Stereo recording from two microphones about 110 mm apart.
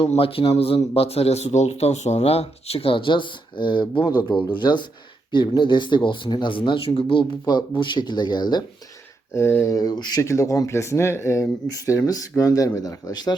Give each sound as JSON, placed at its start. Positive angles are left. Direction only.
{"t": 0.2, "sound": "a man's voice", "side_deg": 55}
{"t": 9.3, "sound": "speech", "side_deg": 25}